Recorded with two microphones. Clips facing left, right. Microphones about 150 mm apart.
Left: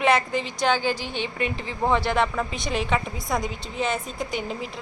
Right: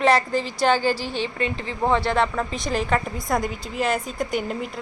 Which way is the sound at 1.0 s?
35° right (ahead or behind).